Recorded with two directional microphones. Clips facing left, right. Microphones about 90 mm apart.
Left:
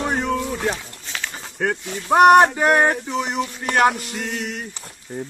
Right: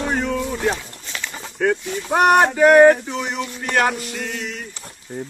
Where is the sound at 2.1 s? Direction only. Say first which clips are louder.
Left 3 dB; 25° left (ahead or behind).